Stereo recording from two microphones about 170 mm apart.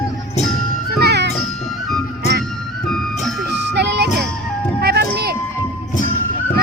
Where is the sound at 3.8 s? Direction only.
80° right.